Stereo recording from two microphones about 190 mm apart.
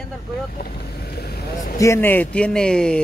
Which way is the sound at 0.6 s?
55° left (ahead or behind).